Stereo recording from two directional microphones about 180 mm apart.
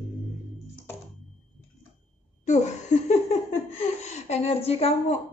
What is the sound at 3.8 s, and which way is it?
A woman's voice, 40° left (ahead or behind).